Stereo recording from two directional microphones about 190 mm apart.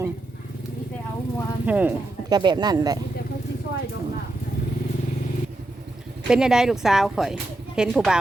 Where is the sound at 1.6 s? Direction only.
10° right (ahead or behind).